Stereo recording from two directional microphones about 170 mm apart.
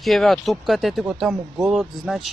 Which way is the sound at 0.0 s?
Centre (ahead or behind).